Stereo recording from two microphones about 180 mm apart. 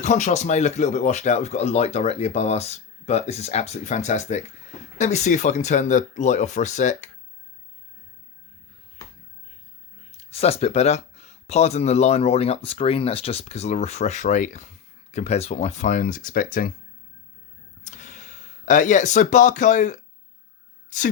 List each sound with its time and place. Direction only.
0.0 s speech: 40° left (ahead or behind)
10.1 s speech: 35° left (ahead or behind); by 16.7 s 50° left (ahead or behind)
17.8 s speech: 45° left (ahead or behind)